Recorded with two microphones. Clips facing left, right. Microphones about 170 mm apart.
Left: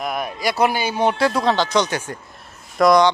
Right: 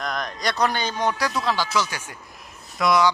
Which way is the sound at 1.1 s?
25° left (ahead or behind).